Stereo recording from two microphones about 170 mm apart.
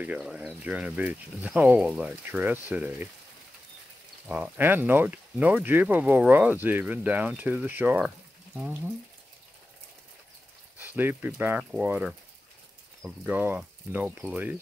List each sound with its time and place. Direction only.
0.0 s speech: 5° right (ahead or behind)
4.3 s speech: 10° right (ahead or behind)
10.8 s speech: 10° right (ahead or behind)
13.2 s speech: 10° right (ahead or behind)